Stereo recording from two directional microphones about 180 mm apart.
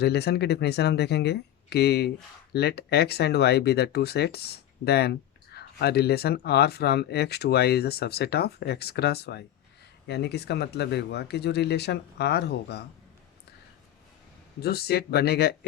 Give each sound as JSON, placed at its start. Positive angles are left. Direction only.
{"t": 0.0, "sound": "speech", "side_deg": 65}
{"t": 14.6, "sound": "speech", "side_deg": 60}